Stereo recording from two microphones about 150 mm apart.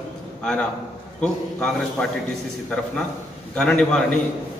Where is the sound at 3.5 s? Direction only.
5° left (ahead or behind).